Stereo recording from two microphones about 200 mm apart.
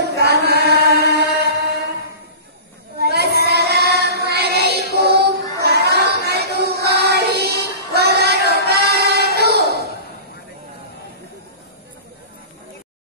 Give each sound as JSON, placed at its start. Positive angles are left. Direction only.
{"t": 0.1, "sound": "chant", "side_deg": -55}
{"t": 3.0, "sound": "child singing", "side_deg": -55}